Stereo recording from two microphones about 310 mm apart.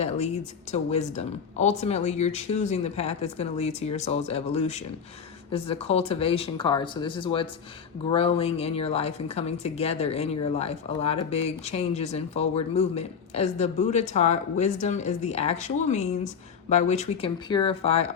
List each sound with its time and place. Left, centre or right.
0.7 s speech: left